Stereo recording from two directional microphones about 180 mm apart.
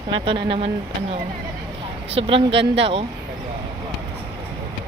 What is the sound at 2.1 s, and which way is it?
Speech, 30° right (ahead or behind).